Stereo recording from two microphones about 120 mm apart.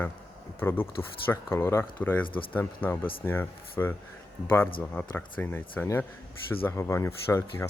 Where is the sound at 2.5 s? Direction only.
15° left (ahead or behind).